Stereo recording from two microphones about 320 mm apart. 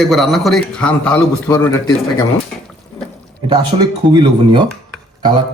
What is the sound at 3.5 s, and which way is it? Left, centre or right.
A man's voice, centre.